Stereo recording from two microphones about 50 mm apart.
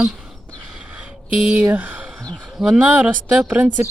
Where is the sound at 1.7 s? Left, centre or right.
Right.